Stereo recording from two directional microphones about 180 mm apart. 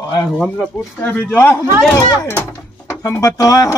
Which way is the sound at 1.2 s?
15° left (ahead or behind).